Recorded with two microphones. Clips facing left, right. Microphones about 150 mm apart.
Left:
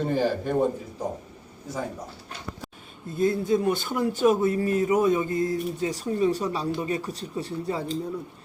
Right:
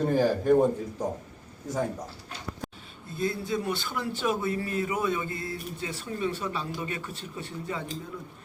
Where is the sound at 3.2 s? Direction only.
45° left (ahead or behind).